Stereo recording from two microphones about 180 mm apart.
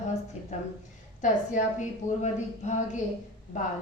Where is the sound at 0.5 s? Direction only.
40° left (ahead or behind).